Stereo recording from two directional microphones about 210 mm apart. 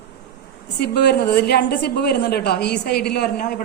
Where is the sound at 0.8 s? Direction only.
50° left (ahead or behind).